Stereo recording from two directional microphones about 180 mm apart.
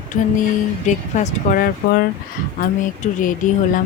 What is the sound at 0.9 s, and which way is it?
Speech, 40° left (ahead or behind).